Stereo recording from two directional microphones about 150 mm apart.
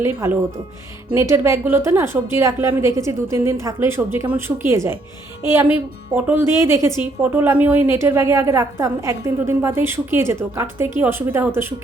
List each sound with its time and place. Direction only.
0.0 s a woman's voice: 15° right (ahead or behind)